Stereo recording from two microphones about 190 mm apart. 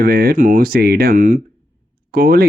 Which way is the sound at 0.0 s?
50° right (ahead or behind).